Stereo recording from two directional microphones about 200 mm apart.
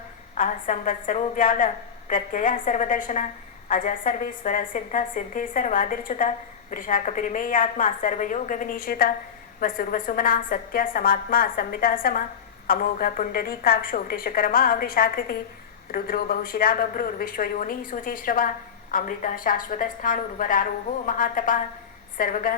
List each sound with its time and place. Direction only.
0.3 s a woman's voice: 40° left (ahead or behind)